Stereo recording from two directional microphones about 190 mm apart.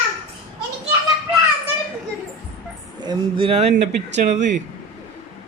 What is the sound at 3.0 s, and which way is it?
Speech, 25° right (ahead or behind).